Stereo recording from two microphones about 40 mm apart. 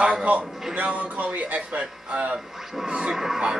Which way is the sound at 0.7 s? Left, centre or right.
Right.